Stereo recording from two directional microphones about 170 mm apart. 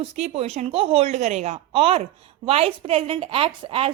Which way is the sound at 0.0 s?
40° right (ahead or behind).